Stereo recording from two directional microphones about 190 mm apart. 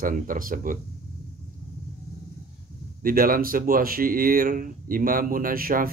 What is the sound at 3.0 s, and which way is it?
Speech, 50° right (ahead or behind).